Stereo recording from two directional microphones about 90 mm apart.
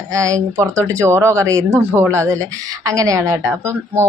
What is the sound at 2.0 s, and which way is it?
Speech, 35° right (ahead or behind).